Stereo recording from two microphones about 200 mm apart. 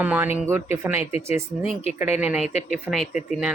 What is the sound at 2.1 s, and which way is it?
Speech, 5° right (ahead or behind).